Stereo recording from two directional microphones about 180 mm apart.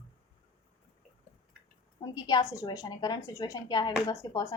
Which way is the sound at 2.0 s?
20° left (ahead or behind).